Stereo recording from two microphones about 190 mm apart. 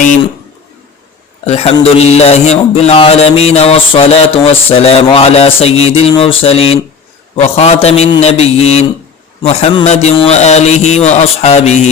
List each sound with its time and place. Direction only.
1.5 s mantra: 30° left (ahead or behind)